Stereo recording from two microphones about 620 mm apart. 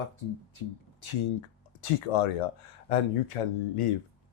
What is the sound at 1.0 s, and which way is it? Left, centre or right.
Speech, left.